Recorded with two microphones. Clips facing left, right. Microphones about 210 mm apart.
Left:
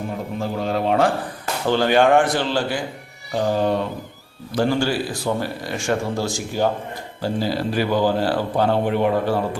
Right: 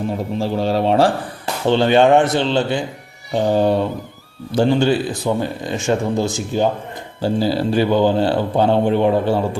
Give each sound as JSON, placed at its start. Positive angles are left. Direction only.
{"t": 0.3, "sound": "speech", "side_deg": -30}